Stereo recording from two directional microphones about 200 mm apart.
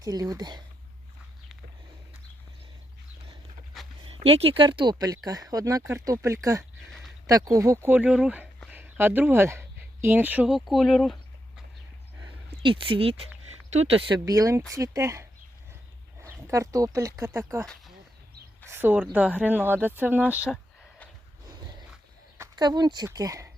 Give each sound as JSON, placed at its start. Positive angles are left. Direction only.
{"t": 0.0, "sound": "speech", "side_deg": -20}
{"t": 4.2, "sound": "speech", "side_deg": -30}
{"t": 12.6, "sound": "speech", "side_deg": -25}
{"t": 14.3, "sound": "speech", "side_deg": -15}
{"t": 18.6, "sound": "a sound", "side_deg": -10}
{"t": 19.1, "sound": "speech", "side_deg": -10}
{"t": 22.4, "sound": "speech", "side_deg": -20}